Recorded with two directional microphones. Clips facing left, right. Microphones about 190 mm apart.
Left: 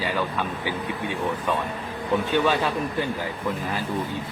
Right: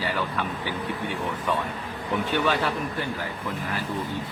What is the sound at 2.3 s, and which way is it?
Speech, 15° left (ahead or behind).